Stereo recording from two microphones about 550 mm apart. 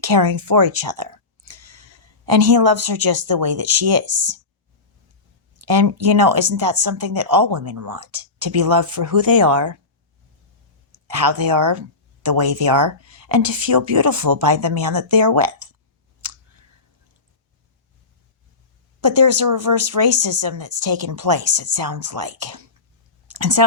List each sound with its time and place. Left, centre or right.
0.0 s a sound: right
2.8 s speech: right
4.0 s speech: centre
5.5 s speech: right
10.9 s speech: right
18.9 s speech: right